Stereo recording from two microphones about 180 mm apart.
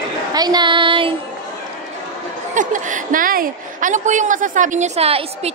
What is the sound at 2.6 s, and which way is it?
A woman's voice, 45° right (ahead or behind).